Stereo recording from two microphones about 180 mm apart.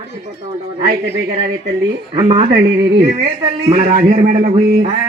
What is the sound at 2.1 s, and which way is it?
Speech, 25° right (ahead or behind).